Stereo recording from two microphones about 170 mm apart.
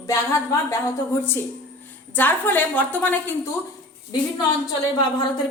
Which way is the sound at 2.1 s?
10° left (ahead or behind).